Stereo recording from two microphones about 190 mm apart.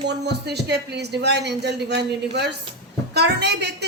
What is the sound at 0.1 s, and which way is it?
A woman's voice, 60° right (ahead or behind).